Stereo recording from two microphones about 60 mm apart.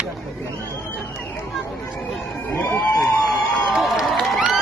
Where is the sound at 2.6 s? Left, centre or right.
Left.